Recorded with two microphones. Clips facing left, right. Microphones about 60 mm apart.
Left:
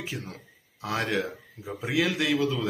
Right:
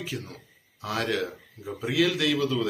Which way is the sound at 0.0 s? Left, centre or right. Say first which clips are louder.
Right 1 dB; centre.